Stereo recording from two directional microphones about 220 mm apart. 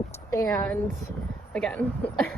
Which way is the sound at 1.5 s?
5° left (ahead or behind).